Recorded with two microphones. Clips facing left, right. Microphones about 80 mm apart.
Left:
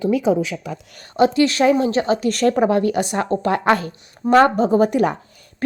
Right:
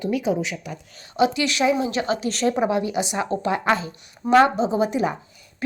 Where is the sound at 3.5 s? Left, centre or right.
Left.